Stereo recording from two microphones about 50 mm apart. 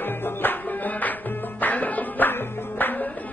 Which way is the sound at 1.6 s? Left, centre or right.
Left.